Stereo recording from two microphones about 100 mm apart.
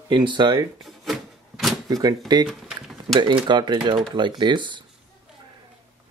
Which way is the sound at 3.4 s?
50° right (ahead or behind).